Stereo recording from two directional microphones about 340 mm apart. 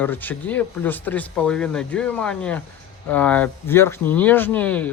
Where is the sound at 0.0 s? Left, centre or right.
Centre.